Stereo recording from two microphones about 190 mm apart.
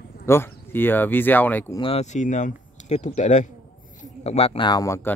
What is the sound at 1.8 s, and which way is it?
Speech, 30° left (ahead or behind).